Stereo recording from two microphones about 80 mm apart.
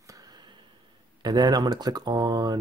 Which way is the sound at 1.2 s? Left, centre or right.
Right.